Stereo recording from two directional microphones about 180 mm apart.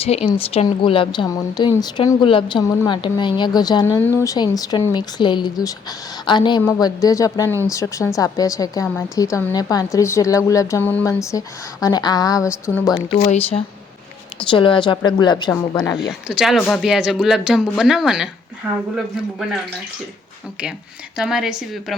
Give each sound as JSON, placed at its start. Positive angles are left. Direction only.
{"t": 0.0, "sound": "a woman's voice", "side_deg": 35}
{"t": 13.1, "sound": "speech", "side_deg": 35}
{"t": 16.0, "sound": "speech", "side_deg": -5}
{"t": 21.2, "sound": "speech", "side_deg": 0}